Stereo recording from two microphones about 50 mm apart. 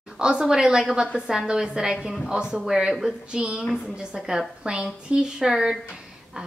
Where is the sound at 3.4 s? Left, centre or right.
Centre.